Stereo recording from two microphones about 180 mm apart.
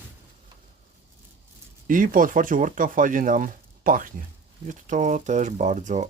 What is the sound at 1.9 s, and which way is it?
Speech, 50° right (ahead or behind).